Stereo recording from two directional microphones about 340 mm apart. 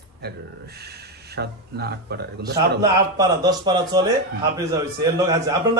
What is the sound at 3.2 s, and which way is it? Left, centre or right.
A man's voice, centre.